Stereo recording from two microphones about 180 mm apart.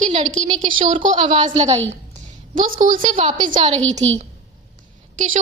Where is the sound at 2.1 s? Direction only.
50° right (ahead or behind).